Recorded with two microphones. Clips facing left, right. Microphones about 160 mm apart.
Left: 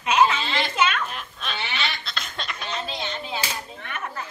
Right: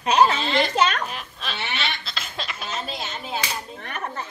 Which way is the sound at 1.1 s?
Centre (ahead or behind).